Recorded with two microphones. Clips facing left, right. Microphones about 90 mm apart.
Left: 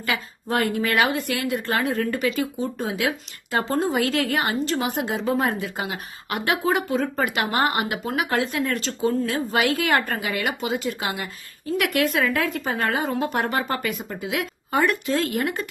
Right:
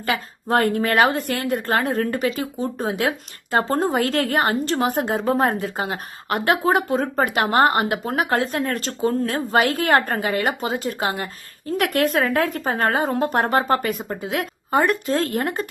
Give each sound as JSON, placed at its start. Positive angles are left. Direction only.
{"t": 0.1, "sound": "a woman's voice", "side_deg": -30}
{"t": 3.7, "sound": "a woman's voice", "side_deg": -50}